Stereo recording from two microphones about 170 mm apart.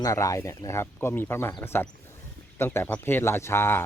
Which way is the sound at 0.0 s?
20° left (ahead or behind).